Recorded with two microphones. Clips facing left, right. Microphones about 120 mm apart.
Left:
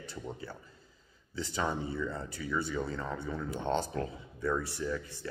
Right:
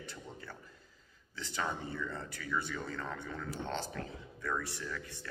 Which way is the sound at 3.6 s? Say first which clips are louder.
Left 9 dB; 35° left (ahead or behind).